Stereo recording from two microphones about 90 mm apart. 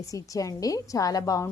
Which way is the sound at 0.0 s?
40° left (ahead or behind).